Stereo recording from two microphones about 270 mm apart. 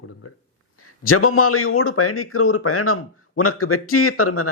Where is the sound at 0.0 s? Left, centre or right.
Left.